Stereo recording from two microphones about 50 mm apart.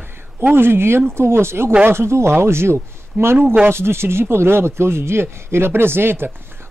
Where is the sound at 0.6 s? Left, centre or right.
Right.